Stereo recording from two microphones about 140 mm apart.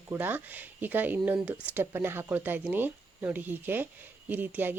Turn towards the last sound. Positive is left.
turn(degrees=-15)  # may be behind; listen again after turning